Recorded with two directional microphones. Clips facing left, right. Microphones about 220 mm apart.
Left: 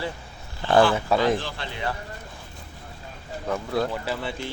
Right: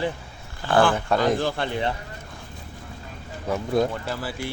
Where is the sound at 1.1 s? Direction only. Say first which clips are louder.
Right 1 dB; 45° right (ahead or behind).